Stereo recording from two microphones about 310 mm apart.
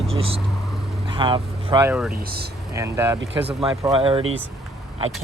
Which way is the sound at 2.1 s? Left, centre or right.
Right.